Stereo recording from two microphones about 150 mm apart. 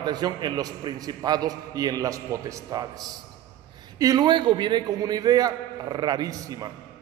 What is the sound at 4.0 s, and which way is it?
A man's voice, 25° right (ahead or behind).